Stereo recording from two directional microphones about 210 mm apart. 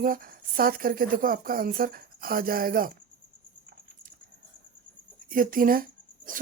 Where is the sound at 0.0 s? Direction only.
45° right (ahead or behind).